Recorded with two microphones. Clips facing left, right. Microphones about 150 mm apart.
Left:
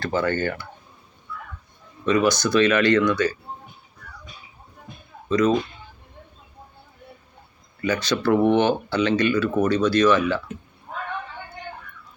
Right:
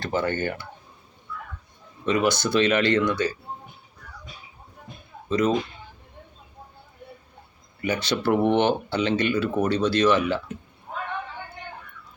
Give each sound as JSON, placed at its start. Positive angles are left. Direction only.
{"t": 0.0, "sound": "speech", "side_deg": -25}
{"t": 2.0, "sound": "speech", "side_deg": -25}
{"t": 5.3, "sound": "speech", "side_deg": -25}
{"t": 7.8, "sound": "speech", "side_deg": -25}